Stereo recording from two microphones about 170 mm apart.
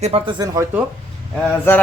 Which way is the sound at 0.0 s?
30° right (ahead or behind).